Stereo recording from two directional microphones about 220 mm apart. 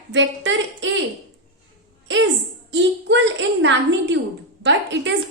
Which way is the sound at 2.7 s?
55° right (ahead or behind).